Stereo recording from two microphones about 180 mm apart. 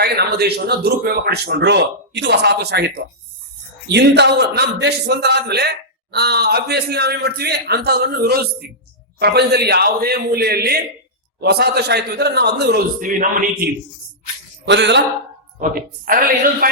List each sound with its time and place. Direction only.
0.0 s speech: 60° right (ahead or behind)
14.6 s speech: 75° right (ahead or behind)
15.5 s speech: 50° right (ahead or behind)